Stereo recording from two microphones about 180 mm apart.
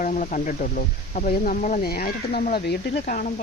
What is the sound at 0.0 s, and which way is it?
Speech, 45° left (ahead or behind).